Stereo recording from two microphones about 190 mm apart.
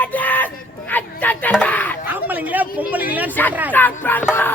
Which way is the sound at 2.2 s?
10° right (ahead or behind).